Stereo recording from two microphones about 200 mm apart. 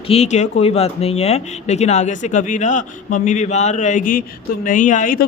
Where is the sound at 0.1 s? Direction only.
35° left (ahead or behind).